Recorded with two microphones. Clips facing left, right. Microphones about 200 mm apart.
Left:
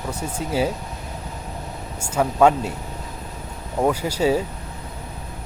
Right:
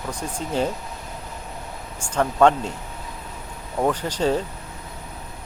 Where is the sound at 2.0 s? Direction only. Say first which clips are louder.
Left 1 dB; 5° left (ahead or behind).